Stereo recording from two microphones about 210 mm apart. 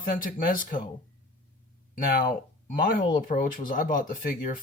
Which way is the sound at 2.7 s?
40° left (ahead or behind).